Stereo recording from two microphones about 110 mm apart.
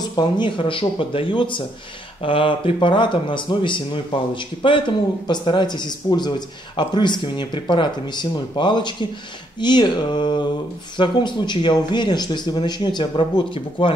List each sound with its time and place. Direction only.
0.0 s speech: 45° left (ahead or behind)